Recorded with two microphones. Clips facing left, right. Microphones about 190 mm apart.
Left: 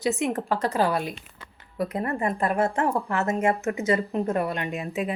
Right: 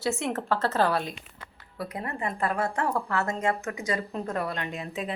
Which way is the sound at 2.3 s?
20° left (ahead or behind).